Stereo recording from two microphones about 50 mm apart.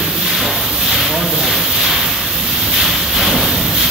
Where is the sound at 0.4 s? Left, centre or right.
Centre.